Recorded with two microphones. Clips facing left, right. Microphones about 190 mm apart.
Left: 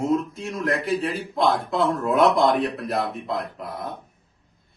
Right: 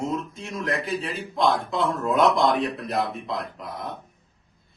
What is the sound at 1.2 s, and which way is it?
Speech, centre (ahead or behind).